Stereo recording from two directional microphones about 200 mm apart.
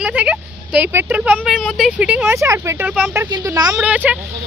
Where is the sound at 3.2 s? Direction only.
20° right (ahead or behind).